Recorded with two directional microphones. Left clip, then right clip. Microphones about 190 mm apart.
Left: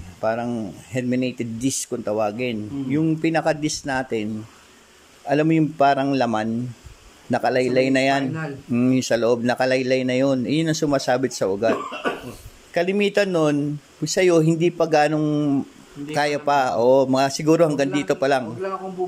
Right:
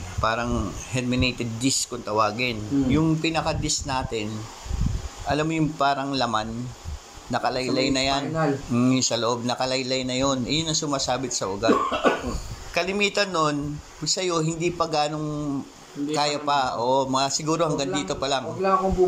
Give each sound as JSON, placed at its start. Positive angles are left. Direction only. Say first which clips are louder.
{"t": 0.2, "sound": "speech", "louder": "left 1 dB", "side_deg": 35}
{"t": 5.3, "sound": "speech", "louder": "left 5 dB", "side_deg": 40}
{"t": 12.7, "sound": "speech", "louder": "left 3 dB", "side_deg": 40}